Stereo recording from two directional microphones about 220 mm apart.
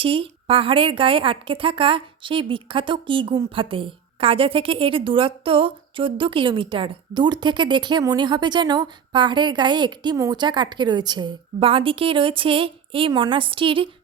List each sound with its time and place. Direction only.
0.0 s a woman's voice: 25° right (ahead or behind)